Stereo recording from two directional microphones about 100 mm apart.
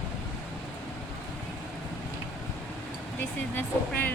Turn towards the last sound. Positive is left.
turn(degrees=20)  # may be behind; listen again after turning